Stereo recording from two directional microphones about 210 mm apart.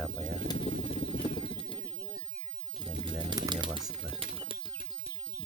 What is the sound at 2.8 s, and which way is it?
Pigeon, 20° right (ahead or behind).